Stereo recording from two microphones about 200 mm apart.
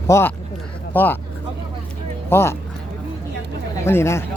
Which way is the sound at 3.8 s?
15° left (ahead or behind).